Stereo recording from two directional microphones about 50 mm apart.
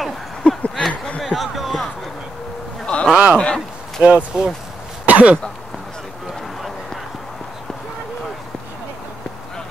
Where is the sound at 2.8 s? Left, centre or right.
Left.